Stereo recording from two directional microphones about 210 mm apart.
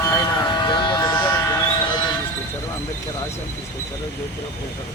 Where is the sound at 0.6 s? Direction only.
20° left (ahead or behind).